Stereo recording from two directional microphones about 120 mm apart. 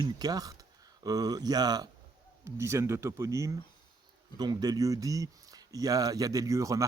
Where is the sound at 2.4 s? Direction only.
25° right (ahead or behind).